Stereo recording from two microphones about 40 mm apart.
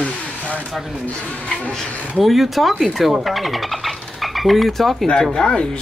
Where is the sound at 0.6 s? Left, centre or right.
Centre.